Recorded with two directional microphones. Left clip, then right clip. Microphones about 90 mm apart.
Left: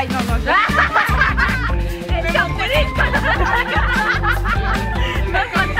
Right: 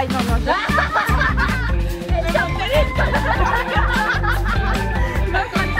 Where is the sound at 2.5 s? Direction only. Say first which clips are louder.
Left 1 dB; 5° left (ahead or behind).